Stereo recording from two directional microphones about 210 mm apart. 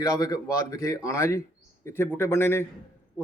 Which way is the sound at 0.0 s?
15° left (ahead or behind).